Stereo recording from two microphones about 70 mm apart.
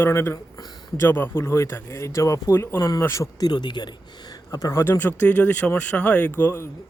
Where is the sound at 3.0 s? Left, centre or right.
Left.